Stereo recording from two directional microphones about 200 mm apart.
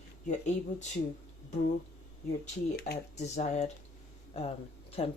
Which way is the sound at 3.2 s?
35° left (ahead or behind).